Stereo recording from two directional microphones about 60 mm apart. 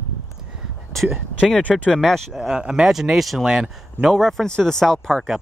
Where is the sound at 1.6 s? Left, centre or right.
Left.